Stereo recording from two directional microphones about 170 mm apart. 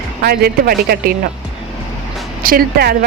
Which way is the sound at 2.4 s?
65° right (ahead or behind).